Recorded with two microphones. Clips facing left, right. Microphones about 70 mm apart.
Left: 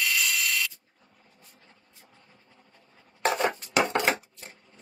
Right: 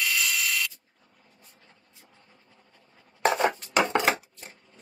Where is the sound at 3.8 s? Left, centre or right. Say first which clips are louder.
Right 1 dB; centre.